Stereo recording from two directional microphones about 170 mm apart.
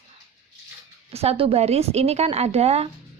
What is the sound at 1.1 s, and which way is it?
Speech, 35° right (ahead or behind).